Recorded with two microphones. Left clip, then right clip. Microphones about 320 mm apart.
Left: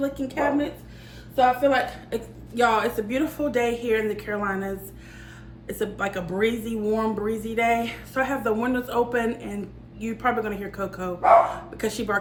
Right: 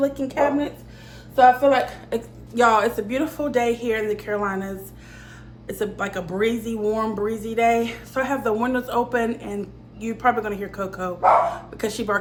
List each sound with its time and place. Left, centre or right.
0.0 s a woman's voice: right